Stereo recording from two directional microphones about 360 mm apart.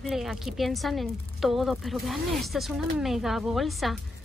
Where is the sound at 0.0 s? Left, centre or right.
Centre.